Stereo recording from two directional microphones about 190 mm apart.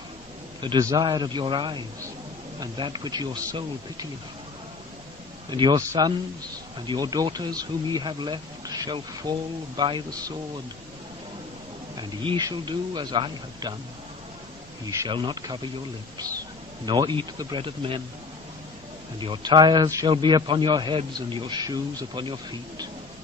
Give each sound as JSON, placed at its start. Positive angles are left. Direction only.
{"t": 0.6, "sound": "speech", "side_deg": -20}
{"t": 5.5, "sound": "speech", "side_deg": -25}
{"t": 12.0, "sound": "speech", "side_deg": -20}
{"t": 14.9, "sound": "speech", "side_deg": -20}
{"t": 16.8, "sound": "speech", "side_deg": -25}
{"t": 19.1, "sound": "speech", "side_deg": -25}